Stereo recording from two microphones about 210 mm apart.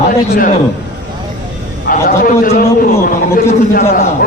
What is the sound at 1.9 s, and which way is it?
Speech, 40° left (ahead or behind).